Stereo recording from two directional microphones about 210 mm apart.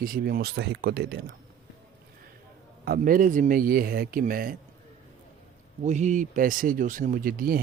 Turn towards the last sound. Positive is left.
turn(degrees=-45)  # may be behind; listen again after turning